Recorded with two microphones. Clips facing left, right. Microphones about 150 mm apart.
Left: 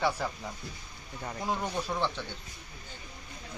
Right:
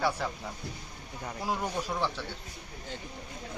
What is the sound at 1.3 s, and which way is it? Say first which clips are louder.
Speech: even; 5° right (ahead or behind).